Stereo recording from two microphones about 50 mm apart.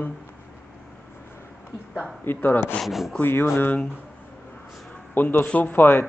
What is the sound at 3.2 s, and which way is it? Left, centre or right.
Speech, left.